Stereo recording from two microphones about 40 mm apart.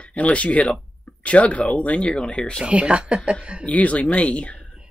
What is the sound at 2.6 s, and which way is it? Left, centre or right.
Speech, right.